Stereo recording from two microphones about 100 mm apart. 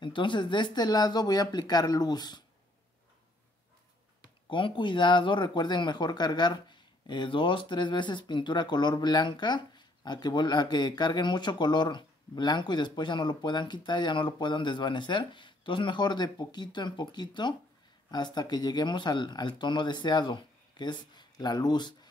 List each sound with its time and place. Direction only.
0.0 s speech: 55° left (ahead or behind)
4.5 s speech: 55° left (ahead or behind)